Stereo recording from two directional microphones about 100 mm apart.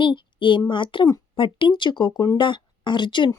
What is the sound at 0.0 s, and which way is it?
A child's voice, 55° left (ahead or behind).